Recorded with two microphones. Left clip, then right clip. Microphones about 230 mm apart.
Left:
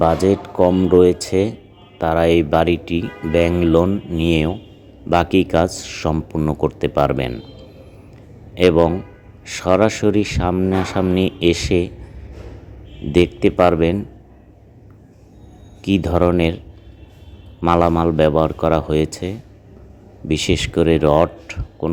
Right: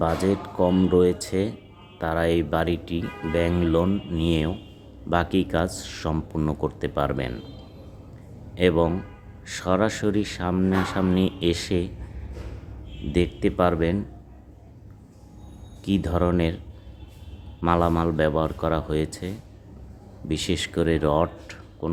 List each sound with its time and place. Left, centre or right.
0.0 s speech: centre
8.5 s speech: centre
13.1 s speech: centre
15.8 s speech: centre
17.6 s speech: centre